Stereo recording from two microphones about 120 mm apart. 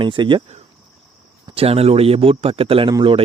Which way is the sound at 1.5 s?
55° right (ahead or behind).